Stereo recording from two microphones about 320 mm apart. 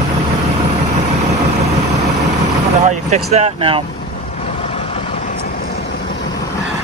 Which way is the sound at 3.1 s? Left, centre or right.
Right.